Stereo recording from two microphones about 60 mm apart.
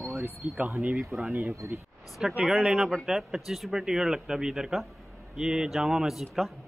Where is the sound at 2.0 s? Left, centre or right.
Centre.